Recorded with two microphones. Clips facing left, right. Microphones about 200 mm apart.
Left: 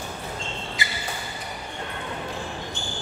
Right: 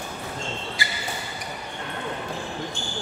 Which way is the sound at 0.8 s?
20° left (ahead or behind).